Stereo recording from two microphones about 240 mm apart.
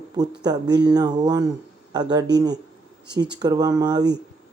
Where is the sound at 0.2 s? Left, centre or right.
Centre.